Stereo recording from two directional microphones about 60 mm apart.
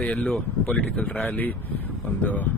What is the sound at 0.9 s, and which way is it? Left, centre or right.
Speech, left.